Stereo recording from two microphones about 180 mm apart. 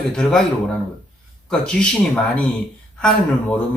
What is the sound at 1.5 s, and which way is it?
Speech, 5° left (ahead or behind).